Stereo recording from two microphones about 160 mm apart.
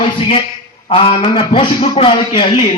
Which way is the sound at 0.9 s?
35° left (ahead or behind).